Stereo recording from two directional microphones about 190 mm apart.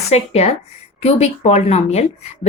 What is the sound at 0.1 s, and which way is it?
Speech, 35° left (ahead or behind).